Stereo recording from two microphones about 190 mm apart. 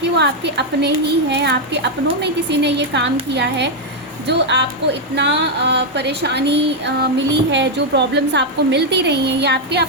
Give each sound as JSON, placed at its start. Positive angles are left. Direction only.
{"t": 0.2, "sound": "speech", "side_deg": -65}